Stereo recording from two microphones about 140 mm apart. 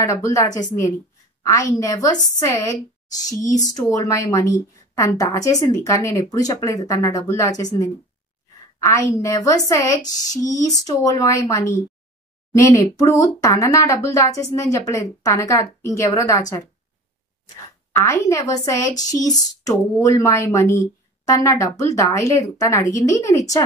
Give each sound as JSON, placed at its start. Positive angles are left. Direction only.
{"t": 0.0, "sound": "speech", "side_deg": 25}
{"t": 17.9, "sound": "speech", "side_deg": 20}